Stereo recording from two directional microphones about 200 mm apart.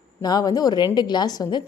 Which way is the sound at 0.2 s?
20° left (ahead or behind).